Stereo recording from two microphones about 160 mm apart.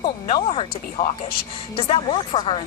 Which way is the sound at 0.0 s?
30° left (ahead or behind).